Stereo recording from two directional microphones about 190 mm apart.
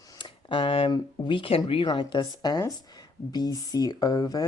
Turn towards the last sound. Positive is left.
turn(degrees=20)  # may be behind; listen again after turning